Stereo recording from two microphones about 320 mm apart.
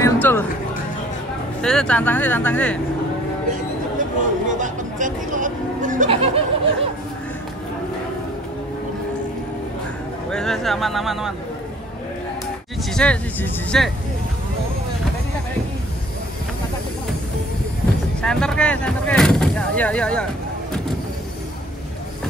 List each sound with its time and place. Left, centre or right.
0.0 s music: centre
1.6 s speech: centre
4.5 s music: right
10.3 s speech: centre
12.9 s speech: centre
18.2 s speech: centre